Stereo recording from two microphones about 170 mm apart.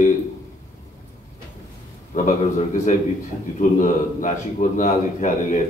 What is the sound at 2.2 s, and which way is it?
A man's voice, 45° left (ahead or behind).